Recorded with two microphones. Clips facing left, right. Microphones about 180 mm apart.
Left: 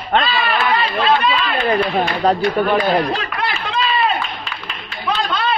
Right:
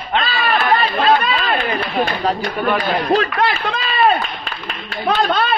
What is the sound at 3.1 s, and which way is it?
A man's voice, 55° right (ahead or behind).